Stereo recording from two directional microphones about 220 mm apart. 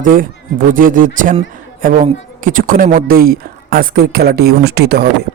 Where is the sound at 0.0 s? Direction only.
40° right (ahead or behind).